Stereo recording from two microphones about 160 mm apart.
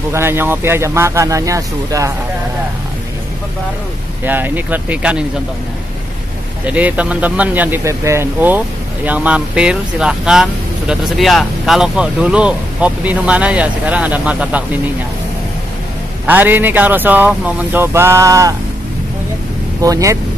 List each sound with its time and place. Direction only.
0.1 s speech: 15° right (ahead or behind)
4.2 s speech: 10° right (ahead or behind)
6.6 s speech: 10° right (ahead or behind)
16.3 s speech: 10° right (ahead or behind)
19.8 s speech: 20° right (ahead or behind)